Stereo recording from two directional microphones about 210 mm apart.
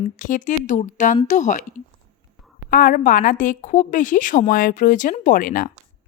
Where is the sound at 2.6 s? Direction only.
40° left (ahead or behind).